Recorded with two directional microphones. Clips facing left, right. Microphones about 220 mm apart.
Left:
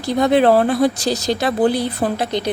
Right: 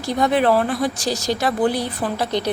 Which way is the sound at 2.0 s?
50° left (ahead or behind).